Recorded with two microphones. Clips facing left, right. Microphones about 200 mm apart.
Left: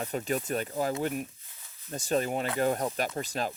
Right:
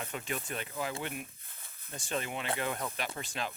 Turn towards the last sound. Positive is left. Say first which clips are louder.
# left 6 dB
turn(degrees=40)  # may be behind; listen again after turning